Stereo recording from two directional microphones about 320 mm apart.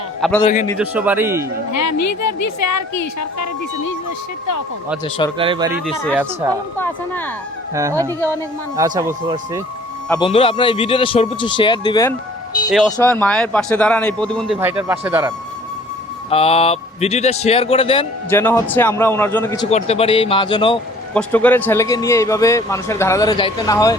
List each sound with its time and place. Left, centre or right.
0.2 s a man's voice: centre
1.7 s a woman's voice: left
5.0 s a man's voice: centre
5.4 s speech: centre
5.8 s a man's voice: centre
7.7 s speech: centre
10.1 s a man's voice: centre
16.3 s a man's voice: centre
19.7 s a man's voice: centre
21.1 s a man's voice: centre